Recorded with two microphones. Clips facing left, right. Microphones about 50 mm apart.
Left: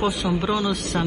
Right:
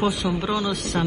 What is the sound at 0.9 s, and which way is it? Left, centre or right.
Speech, centre.